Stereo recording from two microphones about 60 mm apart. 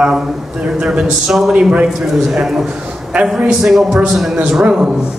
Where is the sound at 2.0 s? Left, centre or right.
Centre.